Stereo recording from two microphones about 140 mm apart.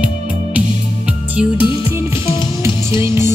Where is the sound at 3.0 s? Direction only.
20° right (ahead or behind).